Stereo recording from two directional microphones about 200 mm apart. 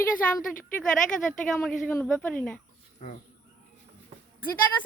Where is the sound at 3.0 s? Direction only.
35° left (ahead or behind).